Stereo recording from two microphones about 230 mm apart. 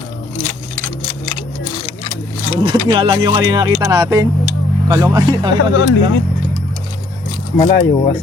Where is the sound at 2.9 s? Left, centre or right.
Centre.